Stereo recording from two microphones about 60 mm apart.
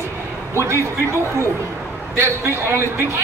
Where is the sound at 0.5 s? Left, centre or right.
Right.